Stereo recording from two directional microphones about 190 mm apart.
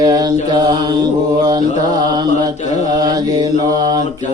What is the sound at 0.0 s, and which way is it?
Mantra, 20° right (ahead or behind).